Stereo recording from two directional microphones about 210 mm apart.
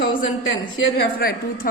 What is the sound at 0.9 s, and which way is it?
Speech, 45° left (ahead or behind).